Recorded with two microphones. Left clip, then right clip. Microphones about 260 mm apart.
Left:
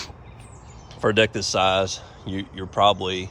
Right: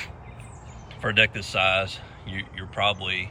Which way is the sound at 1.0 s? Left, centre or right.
Centre.